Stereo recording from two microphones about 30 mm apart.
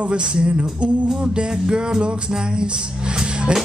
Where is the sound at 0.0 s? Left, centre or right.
Right.